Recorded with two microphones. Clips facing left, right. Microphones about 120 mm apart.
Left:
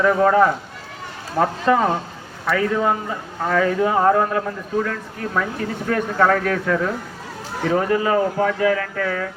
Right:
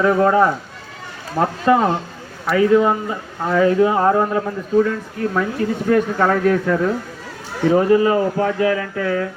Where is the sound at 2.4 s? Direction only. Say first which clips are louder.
Right 5 dB; 10° right (ahead or behind).